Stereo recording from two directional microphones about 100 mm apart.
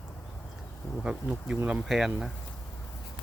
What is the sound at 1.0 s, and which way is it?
Speech, 10° right (ahead or behind).